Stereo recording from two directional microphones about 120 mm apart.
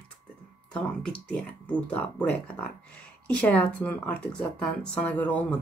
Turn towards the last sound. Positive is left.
turn(degrees=10)  # may be behind; listen again after turning